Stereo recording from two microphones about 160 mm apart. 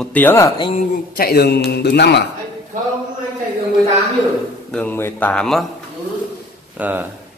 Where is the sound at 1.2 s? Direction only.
75° left (ahead or behind); by 2.3 s 90° left.